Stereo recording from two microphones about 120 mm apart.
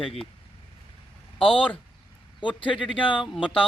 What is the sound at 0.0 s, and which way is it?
Speech, 50° left (ahead or behind).